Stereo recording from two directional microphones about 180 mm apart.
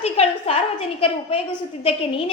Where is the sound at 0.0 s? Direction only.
35° left (ahead or behind).